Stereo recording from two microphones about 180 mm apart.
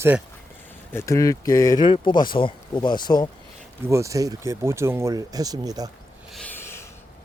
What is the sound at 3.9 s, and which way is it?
Speech, 15° right (ahead or behind).